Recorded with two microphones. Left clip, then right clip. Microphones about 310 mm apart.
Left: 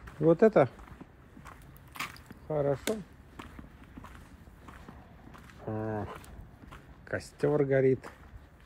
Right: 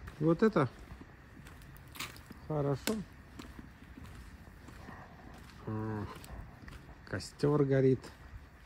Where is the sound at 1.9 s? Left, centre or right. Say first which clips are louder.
Left 5 dB; centre.